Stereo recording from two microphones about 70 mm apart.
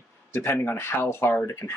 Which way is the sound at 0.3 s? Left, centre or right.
Left.